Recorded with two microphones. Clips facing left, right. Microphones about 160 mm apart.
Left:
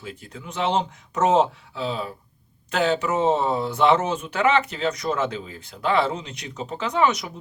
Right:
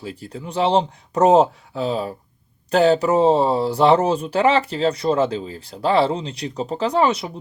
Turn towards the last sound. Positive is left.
turn(degrees=-30)  # may be behind; listen again after turning